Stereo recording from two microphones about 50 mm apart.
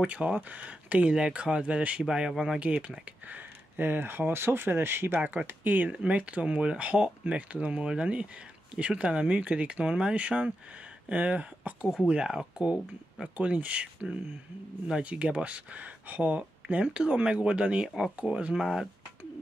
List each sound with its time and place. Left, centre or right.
0.0 s speech: right; by 2.6 s centre
2.6 s speech: right
3.3 s a sound: right
4.3 s speech: right
5.5 s speech: right
5.9 s speech: right
12.1 s speech: centre
13.4 s speech: right
17.8 s speech: centre
18.2 s speech: centre